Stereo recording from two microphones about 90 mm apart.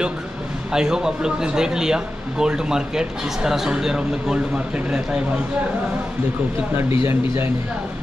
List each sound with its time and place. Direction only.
0.7 s speech: 5° right (ahead or behind)
7.1 s speech: 25° right (ahead or behind)